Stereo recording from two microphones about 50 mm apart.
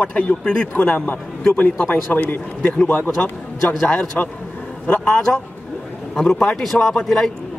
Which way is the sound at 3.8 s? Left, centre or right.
Centre.